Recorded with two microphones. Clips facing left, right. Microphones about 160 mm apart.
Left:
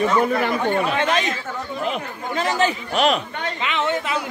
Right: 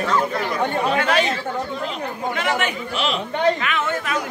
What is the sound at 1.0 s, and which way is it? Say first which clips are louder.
Speech: right 2 dB; 30° right (ahead or behind).